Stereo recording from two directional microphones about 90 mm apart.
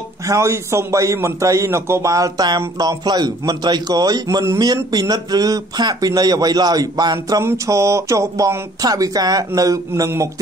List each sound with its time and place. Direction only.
0.3 s a man's voice: 35° right (ahead or behind)